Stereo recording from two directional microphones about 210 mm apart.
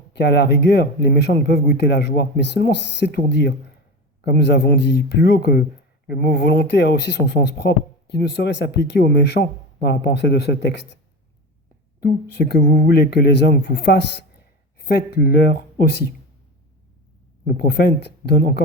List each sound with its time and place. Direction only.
0.1 s speech: 55° left (ahead or behind)
11.9 s speech: 50° left (ahead or behind)
17.4 s speech: 50° left (ahead or behind)